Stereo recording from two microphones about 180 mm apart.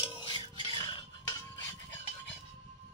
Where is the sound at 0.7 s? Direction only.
25° left (ahead or behind).